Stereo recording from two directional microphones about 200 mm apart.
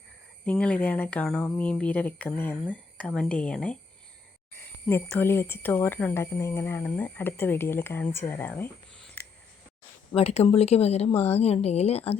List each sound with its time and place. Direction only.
0.4 s speech: 5° left (ahead or behind)
4.9 s speech: 10° left (ahead or behind)
10.2 s speech: 30° left (ahead or behind)